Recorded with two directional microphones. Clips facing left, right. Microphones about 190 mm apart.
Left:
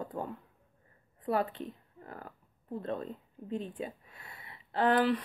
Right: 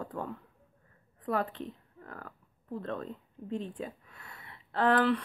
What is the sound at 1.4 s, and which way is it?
Speech, 5° left (ahead or behind).